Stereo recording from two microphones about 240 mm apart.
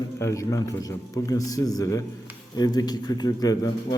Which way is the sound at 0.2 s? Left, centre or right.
Centre.